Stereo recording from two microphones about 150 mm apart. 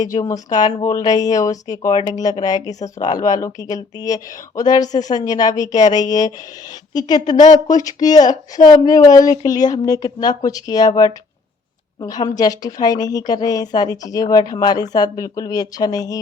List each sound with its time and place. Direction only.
0.0 s speech: 25° left (ahead or behind)